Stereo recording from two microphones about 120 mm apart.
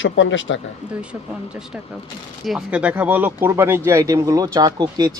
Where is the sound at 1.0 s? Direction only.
10° right (ahead or behind).